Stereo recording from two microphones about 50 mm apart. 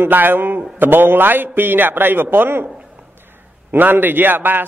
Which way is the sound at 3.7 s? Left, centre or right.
Right.